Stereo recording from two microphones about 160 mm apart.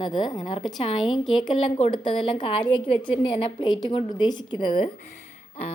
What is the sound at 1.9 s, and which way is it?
A woman's voice, 30° left (ahead or behind).